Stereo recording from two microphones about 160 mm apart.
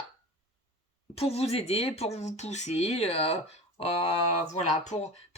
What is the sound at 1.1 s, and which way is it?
Speech, 40° left (ahead or behind).